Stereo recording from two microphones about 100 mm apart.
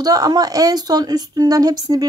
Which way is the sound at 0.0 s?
40° right (ahead or behind).